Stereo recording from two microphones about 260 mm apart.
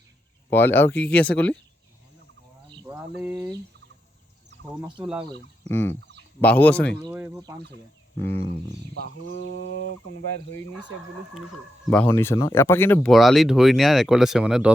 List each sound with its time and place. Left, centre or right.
0.5 s speech: centre
2.6 s cricket: centre
2.9 s a sound: centre
5.6 s fowl: centre
6.4 s speech: centre
7.0 s a sound: centre
8.2 s fowl: centre
9.3 s bird: right
10.1 s speech: left
11.9 s speech: centre